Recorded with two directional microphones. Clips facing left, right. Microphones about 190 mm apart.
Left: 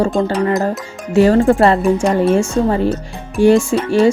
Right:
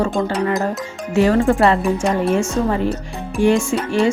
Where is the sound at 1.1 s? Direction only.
35° left (ahead or behind).